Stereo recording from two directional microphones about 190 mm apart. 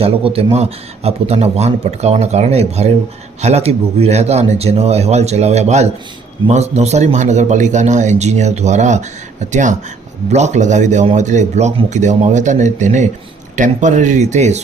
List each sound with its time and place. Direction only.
0.0 s a man's voice: 30° right (ahead or behind)